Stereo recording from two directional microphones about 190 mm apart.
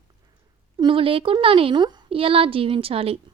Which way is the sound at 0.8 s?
25° right (ahead or behind).